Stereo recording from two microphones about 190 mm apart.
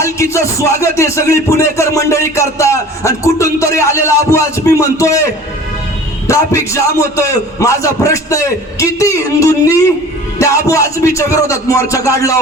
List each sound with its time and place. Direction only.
0.0 s music: 15° left (ahead or behind)
6.2 s music: 15° left (ahead or behind)